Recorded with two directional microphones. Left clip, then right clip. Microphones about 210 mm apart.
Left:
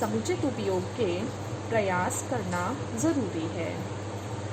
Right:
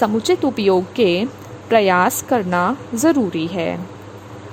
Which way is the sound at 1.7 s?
50° right (ahead or behind).